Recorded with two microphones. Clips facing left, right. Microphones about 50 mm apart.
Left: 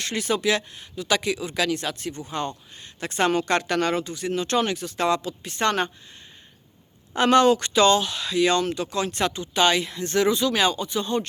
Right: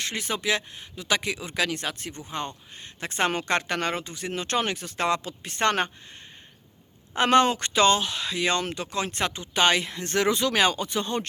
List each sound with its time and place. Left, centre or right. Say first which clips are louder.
0.0 s speech: left 5 dB; centre; by 5.9 s right
7.2 s speech: left 3 dB; right